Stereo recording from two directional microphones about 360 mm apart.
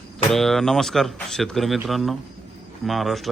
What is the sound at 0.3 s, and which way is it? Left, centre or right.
A man's voice, centre.